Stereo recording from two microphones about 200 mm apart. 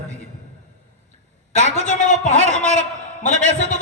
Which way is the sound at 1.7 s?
40° left (ahead or behind).